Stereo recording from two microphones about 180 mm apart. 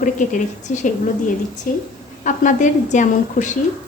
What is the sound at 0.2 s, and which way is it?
A woman's voice, 45° left (ahead or behind).